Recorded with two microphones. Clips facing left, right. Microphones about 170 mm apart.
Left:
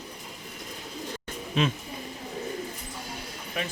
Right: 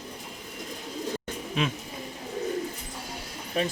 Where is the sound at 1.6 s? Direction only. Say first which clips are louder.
Left 3 dB; 10° right (ahead or behind).